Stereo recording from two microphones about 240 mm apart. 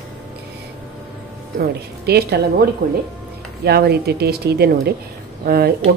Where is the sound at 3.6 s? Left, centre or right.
Right.